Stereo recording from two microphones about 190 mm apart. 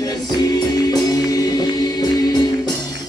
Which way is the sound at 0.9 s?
20° left (ahead or behind).